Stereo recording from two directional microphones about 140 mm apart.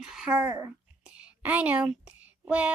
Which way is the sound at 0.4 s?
20° right (ahead or behind).